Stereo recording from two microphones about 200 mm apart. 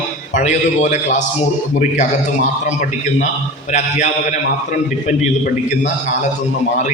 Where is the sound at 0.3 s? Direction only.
40° left (ahead or behind).